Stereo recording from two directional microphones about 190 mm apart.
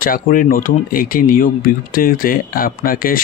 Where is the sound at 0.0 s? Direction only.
45° left (ahead or behind).